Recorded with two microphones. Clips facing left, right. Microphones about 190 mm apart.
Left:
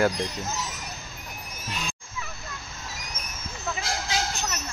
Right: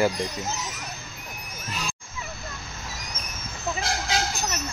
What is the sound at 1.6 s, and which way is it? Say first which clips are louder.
Music: right 1 dB; centre (ahead or behind).